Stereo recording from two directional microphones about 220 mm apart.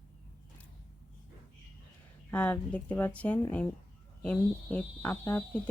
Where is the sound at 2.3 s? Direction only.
5° left (ahead or behind).